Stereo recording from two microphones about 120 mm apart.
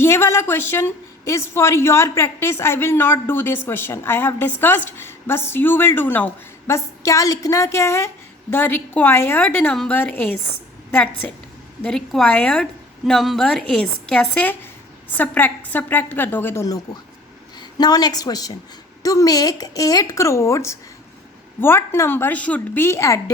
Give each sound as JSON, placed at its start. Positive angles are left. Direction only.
{"t": 0.0, "sound": "a woman's voice", "side_deg": 20}
{"t": 11.8, "sound": "a woman's voice", "side_deg": 5}
{"t": 17.6, "sound": "a woman's voice", "side_deg": 35}